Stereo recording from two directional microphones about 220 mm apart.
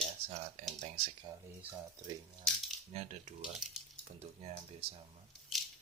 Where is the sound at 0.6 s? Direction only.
30° right (ahead or behind).